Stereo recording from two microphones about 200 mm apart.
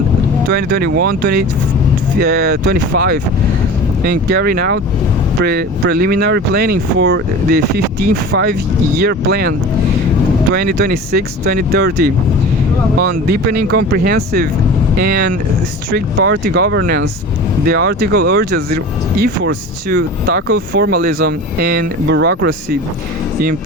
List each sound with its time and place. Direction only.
0.5 s speech: 50° right (ahead or behind)